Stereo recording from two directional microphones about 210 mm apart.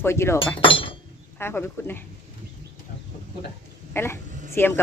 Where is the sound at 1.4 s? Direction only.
10° left (ahead or behind).